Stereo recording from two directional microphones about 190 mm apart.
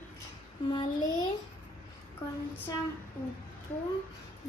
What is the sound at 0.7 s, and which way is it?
Speech, 25° left (ahead or behind).